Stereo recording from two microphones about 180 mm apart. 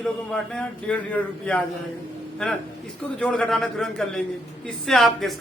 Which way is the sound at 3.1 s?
5° left (ahead or behind).